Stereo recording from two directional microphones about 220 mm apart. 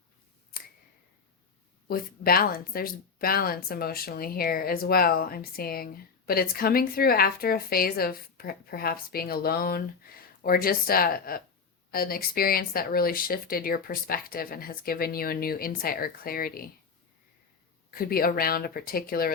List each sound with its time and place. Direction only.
1.9 s speech: 40° left (ahead or behind)
17.9 s speech: 40° left (ahead or behind)